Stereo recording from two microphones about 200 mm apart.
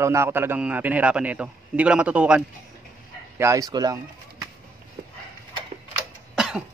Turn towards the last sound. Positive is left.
turn(degrees=0)  # may be behind; listen again after turning